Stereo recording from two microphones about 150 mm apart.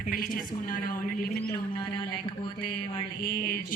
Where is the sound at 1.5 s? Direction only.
30° left (ahead or behind).